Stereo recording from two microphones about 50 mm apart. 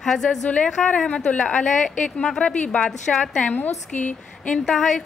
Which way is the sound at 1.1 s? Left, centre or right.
Left.